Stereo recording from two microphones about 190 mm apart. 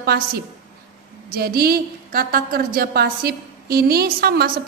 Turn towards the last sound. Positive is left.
turn(degrees=-55)  # may be behind; listen again after turning